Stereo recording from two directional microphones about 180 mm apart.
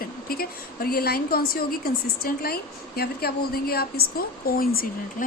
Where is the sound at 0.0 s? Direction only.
55° left (ahead or behind).